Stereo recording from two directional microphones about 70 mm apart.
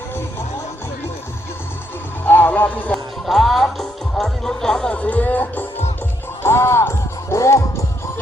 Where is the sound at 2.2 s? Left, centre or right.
Left.